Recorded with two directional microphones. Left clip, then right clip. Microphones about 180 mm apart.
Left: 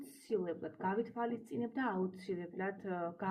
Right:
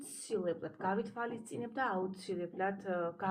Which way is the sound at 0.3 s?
45° left (ahead or behind).